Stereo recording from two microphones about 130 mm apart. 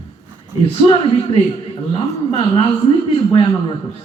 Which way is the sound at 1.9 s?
55° left (ahead or behind).